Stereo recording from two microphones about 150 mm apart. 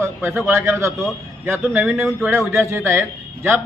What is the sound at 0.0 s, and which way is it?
A man's voice, 15° right (ahead or behind).